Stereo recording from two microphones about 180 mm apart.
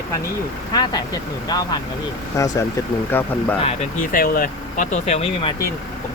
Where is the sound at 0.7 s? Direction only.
20° left (ahead or behind).